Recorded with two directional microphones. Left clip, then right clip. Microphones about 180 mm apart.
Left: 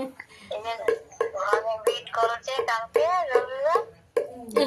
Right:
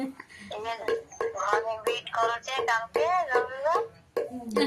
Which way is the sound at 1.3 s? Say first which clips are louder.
Left 2 dB; 10° left (ahead or behind).